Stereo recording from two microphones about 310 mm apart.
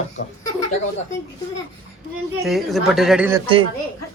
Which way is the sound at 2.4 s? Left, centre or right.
Centre.